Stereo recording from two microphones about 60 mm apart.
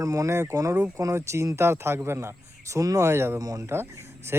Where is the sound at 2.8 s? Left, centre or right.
Right.